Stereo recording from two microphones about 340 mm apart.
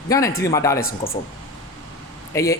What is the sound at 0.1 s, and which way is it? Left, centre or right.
Speech, centre.